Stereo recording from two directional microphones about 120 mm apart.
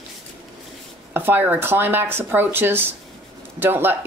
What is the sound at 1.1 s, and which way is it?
Speech, 15° right (ahead or behind).